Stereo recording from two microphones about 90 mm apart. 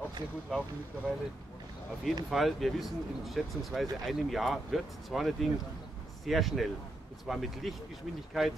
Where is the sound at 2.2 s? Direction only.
Centre (ahead or behind).